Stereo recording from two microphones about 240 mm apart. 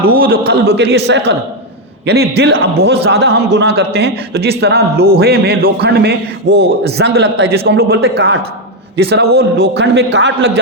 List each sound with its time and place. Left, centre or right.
0.0 s a man's voice: right